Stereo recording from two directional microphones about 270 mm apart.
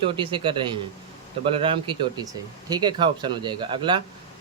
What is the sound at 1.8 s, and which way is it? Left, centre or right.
Speech, centre.